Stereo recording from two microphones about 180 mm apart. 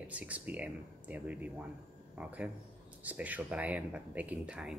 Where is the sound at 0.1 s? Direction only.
10° right (ahead or behind).